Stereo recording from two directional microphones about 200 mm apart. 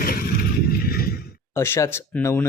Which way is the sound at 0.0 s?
45° left (ahead or behind).